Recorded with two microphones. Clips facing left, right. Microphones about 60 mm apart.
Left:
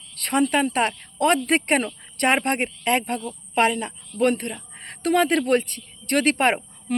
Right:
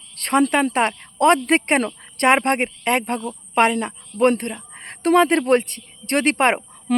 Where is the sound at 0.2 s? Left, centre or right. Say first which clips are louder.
Right 3 dB; right.